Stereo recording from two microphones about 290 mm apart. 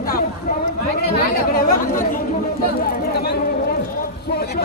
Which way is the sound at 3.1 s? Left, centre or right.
Left.